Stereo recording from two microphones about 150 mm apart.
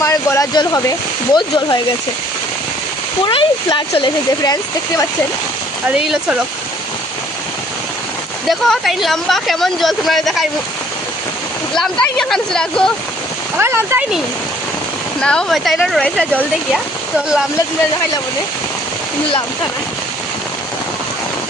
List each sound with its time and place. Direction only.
0.0 s speech: 20° left (ahead or behind)
3.2 s speech: 30° left (ahead or behind)
6.1 s speech: 5° right (ahead or behind)
8.4 s speech: centre (ahead or behind)
11.7 s speech: 5° left (ahead or behind)
13.6 s speech: 15° right (ahead or behind)
15.2 s speech: 5° left (ahead or behind)